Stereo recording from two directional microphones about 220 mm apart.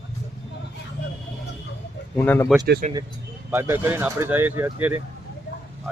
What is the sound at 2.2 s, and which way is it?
Speech, 10° left (ahead or behind).